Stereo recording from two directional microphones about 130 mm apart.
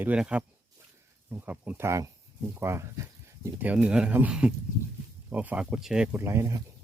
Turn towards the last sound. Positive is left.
turn(degrees=-20)  # may be behind; listen again after turning